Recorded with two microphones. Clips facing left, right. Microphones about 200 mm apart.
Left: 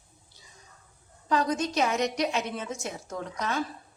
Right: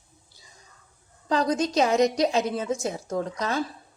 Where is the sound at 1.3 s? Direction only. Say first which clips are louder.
Right 3 dB; 35° right (ahead or behind).